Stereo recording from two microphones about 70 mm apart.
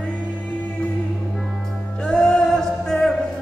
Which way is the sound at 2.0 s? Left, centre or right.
Centre.